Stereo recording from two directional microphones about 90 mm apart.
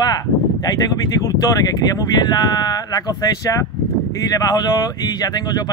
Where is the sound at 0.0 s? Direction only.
45° left (ahead or behind).